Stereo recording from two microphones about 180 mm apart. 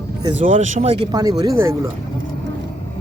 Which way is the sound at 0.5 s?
40° right (ahead or behind).